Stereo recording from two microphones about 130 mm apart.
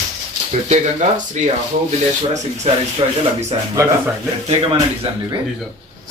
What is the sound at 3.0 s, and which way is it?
Speech, 40° right (ahead or behind).